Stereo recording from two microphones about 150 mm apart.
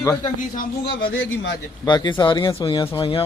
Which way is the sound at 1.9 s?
30° left (ahead or behind).